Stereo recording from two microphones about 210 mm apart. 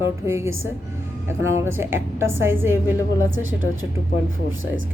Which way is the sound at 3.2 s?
65° right (ahead or behind).